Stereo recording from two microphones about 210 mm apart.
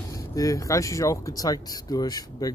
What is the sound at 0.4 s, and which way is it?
Speech, 15° left (ahead or behind).